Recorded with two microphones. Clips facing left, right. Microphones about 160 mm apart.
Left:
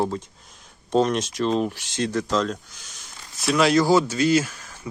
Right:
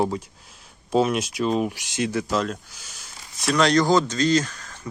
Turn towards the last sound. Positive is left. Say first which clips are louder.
# even
turn(degrees=10)  # may be behind; listen again after turning